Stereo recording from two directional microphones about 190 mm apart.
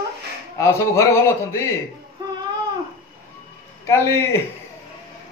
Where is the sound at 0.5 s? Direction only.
15° left (ahead or behind).